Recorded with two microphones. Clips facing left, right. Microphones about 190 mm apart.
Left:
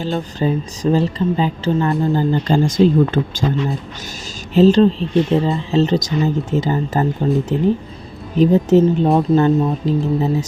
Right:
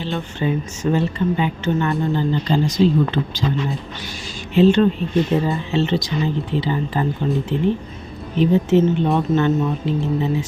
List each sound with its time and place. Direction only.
0.0 s speech: 40° left (ahead or behind)
4.5 s speech: 35° left (ahead or behind)